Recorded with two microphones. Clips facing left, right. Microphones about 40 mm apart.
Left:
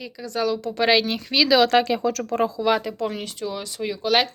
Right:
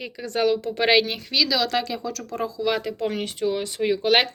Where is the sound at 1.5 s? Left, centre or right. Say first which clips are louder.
Left 7 dB; left.